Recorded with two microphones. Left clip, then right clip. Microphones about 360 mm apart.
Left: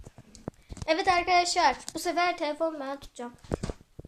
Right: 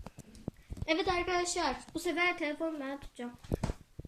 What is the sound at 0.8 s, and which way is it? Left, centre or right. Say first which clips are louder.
A woman's voice: left 7 dB; centre.